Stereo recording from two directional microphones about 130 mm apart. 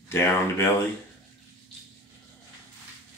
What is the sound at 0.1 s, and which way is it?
Speech, 20° left (ahead or behind).